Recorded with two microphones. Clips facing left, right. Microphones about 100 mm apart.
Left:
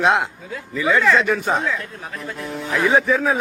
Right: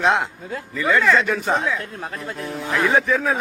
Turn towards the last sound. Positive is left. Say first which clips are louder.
# left 2 dB
turn(degrees=0)  # may be behind; listen again after turning